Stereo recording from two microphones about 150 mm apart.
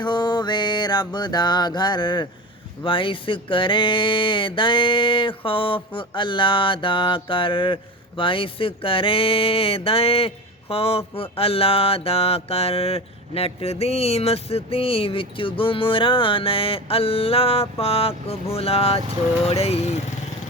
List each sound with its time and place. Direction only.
0.0 s music: 30° left (ahead or behind)
2.8 s a sound: 35° left (ahead or behind)
19.5 s speech: 45° left (ahead or behind)